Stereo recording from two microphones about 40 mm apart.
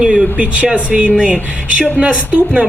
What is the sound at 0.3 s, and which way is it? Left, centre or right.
A woman's voice, right.